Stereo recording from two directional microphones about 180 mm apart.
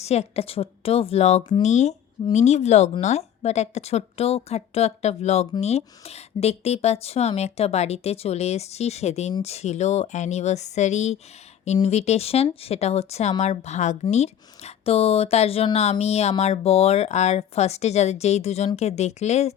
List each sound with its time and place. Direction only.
0.0 s a woman's voice: 35° left (ahead or behind)